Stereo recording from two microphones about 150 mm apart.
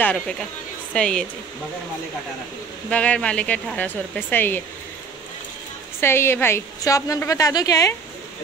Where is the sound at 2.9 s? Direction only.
10° left (ahead or behind).